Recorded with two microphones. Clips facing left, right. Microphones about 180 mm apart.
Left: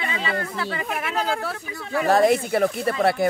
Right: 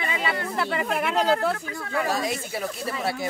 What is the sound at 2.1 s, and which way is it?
Speech, 55° left (ahead or behind).